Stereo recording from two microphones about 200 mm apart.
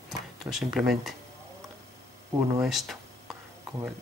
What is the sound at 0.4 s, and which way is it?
Speech, centre (ahead or behind).